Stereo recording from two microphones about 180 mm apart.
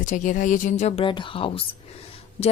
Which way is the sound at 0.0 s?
45° left (ahead or behind).